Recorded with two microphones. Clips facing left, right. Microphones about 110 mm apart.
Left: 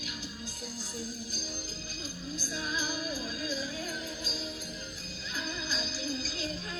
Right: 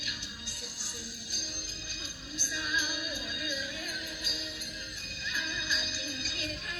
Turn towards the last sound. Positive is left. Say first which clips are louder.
# left 4 dB
turn(degrees=35)  # may be behind; listen again after turning